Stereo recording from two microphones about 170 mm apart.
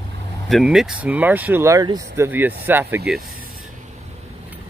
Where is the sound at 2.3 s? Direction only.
10° right (ahead or behind).